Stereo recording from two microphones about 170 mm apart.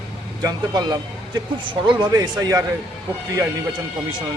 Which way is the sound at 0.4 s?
25° right (ahead or behind).